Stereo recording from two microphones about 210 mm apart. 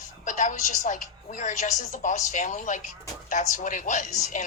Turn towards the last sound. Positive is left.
turn(degrees=35)  # may be behind; listen again after turning